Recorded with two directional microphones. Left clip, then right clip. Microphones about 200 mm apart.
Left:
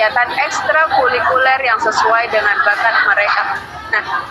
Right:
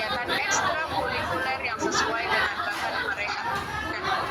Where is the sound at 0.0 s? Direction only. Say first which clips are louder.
Left 13 dB; 40° left (ahead or behind).